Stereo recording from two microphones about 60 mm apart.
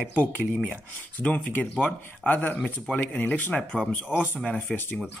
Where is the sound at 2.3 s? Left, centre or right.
Left.